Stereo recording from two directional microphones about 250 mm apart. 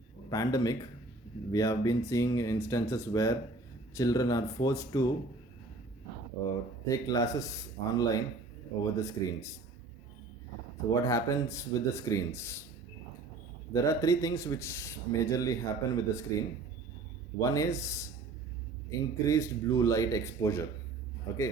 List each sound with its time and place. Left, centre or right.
0.3 s speech: centre
6.5 s speech: centre
11.0 s speech: centre
13.7 s speech: centre
17.3 s speech: centre